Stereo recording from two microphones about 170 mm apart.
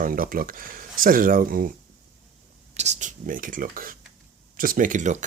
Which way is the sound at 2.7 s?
40° right (ahead or behind).